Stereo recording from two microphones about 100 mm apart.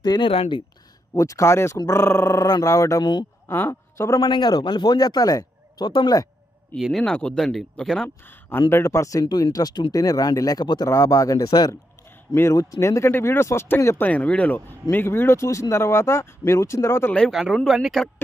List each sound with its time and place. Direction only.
0.0 s speech: 45° left (ahead or behind)
0.3 s speech: 65° left (ahead or behind)
1.1 s speech: 35° left (ahead or behind)
3.4 s a woman's voice: 20° left (ahead or behind)
4.2 s speech: 50° left (ahead or behind)
6.8 s speech: centre (ahead or behind)
8.3 s speech: 20° left (ahead or behind); by 10.9 s 45° left (ahead or behind)
10.9 s speech: 30° left (ahead or behind)
12.4 s speech: 25° left (ahead or behind)
14.0 s speech: 15° left (ahead or behind)
17.3 s speech: centre (ahead or behind)